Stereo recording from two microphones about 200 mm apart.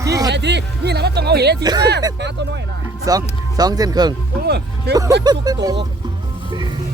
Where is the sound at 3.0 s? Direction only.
20° right (ahead or behind).